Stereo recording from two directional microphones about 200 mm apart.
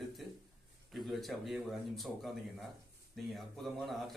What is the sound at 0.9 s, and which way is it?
Speech, centre (ahead or behind).